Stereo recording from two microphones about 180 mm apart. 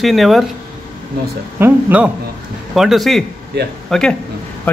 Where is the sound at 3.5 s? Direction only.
65° right (ahead or behind).